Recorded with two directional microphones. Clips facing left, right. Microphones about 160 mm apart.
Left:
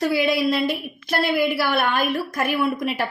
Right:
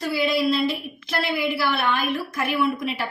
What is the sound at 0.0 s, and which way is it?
A woman's voice, 55° left (ahead or behind).